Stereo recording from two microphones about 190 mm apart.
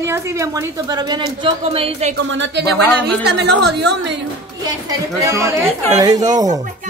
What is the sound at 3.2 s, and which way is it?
Speech, 60° right (ahead or behind).